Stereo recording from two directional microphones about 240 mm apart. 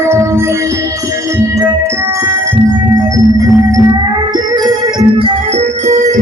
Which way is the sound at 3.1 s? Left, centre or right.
Centre.